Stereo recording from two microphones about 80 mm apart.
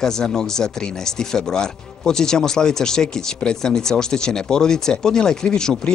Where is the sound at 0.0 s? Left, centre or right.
Centre.